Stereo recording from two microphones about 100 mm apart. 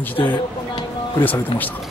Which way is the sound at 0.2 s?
55° left (ahead or behind).